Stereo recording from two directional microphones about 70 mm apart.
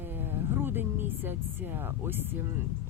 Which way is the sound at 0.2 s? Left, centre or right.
Right.